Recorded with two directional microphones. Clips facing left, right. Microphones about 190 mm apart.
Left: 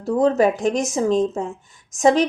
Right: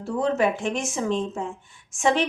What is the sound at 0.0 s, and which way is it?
A woman's voice, 40° left (ahead or behind).